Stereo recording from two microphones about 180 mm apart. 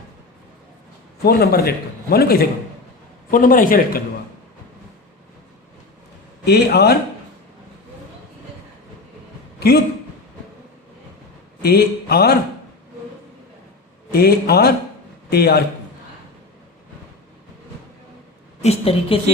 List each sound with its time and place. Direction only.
1.2 s speech: 60° left (ahead or behind)
6.4 s speech: 65° left (ahead or behind)
9.6 s a sound: 65° left (ahead or behind)
11.6 s speech: 60° left (ahead or behind)
14.1 s speech: 60° left (ahead or behind)
18.6 s a woman's voice: 35° left (ahead or behind)